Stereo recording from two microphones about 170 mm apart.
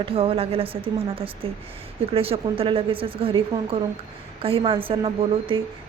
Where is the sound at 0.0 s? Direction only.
35° right (ahead or behind).